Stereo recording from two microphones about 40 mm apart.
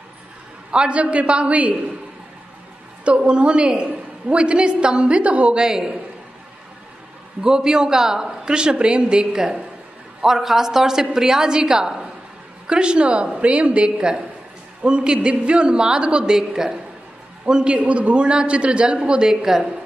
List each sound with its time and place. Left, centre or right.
0.7 s a woman's voice: right
3.1 s a woman's voice: right
5.6 s a woman's voice: centre
7.4 s a woman's voice: centre
10.2 s a woman's voice: centre
17.7 s a woman's voice: right
19.2 s a woman's voice: centre